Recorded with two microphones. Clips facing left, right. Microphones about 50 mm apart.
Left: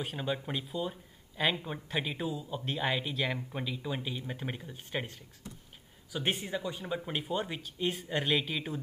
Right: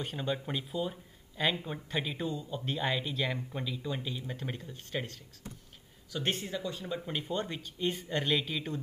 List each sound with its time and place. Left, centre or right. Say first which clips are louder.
0.0 s speech: even; centre